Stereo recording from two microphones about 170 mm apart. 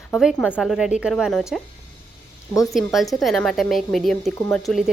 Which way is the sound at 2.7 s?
Centre (ahead or behind).